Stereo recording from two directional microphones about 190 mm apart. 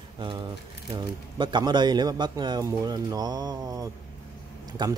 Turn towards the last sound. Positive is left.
turn(degrees=-25)  # may be behind; listen again after turning